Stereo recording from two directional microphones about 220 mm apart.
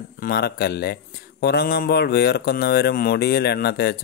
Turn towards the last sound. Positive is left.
turn(degrees=45)  # may be behind; listen again after turning